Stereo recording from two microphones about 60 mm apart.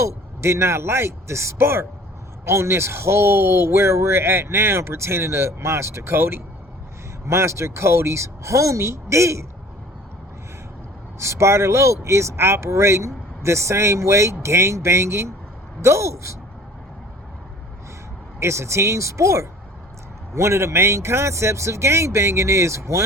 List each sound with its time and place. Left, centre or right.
0.4 s speech: right
11.2 s speech: right
18.3 s speech: right